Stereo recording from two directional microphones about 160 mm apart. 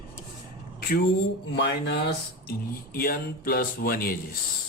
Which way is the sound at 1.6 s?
90° left.